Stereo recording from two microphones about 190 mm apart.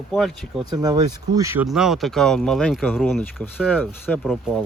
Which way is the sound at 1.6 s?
Centre (ahead or behind).